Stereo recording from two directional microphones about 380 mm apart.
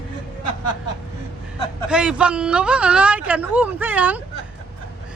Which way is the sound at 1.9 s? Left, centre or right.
Centre.